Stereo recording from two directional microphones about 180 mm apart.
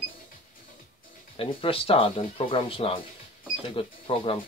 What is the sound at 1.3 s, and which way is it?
Speech, 30° left (ahead or behind).